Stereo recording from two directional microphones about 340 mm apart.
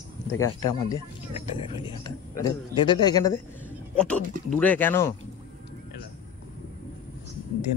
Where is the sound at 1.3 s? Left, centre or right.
Centre.